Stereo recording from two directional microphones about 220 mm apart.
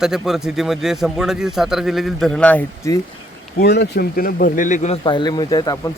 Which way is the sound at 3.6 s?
50° left (ahead or behind).